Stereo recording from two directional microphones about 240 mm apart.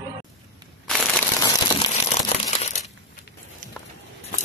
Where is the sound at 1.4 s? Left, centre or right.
Centre.